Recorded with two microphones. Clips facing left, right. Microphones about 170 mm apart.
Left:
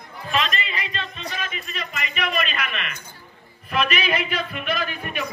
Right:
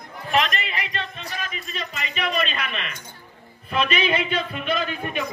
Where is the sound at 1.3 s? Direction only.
35° right (ahead or behind).